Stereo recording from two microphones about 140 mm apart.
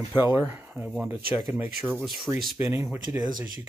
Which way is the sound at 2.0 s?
Centre (ahead or behind).